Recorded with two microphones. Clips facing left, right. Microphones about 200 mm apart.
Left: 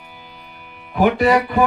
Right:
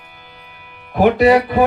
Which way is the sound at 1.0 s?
45° right (ahead or behind).